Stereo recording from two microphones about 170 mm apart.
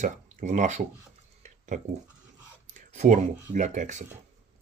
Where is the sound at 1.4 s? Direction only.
45° right (ahead or behind).